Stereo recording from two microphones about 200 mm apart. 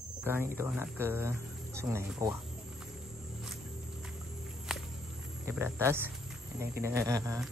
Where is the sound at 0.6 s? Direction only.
10° right (ahead or behind).